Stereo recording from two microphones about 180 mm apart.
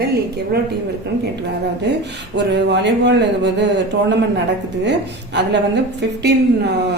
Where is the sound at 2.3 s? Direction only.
75° right (ahead or behind).